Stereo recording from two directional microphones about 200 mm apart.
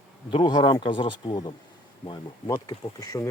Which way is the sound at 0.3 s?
25° left (ahead or behind).